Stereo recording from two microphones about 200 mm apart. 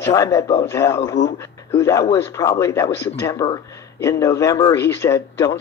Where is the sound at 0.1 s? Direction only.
15° left (ahead or behind).